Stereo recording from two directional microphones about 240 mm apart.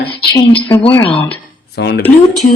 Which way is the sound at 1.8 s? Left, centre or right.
Left.